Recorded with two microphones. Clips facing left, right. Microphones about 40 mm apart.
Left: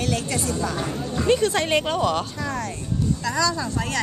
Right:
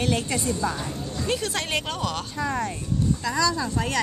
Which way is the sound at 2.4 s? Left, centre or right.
Centre.